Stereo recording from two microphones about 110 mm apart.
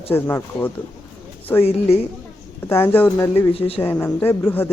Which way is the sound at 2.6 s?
20° left (ahead or behind).